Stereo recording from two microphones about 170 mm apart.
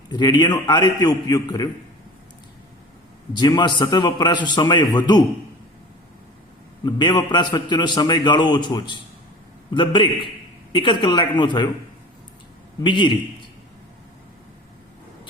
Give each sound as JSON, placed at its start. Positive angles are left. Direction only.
{"t": 0.1, "sound": "a man's voice", "side_deg": 25}
{"t": 3.3, "sound": "a man's voice", "side_deg": 25}
{"t": 6.8, "sound": "a man's voice", "side_deg": 25}
{"t": 12.8, "sound": "a man's voice", "side_deg": 30}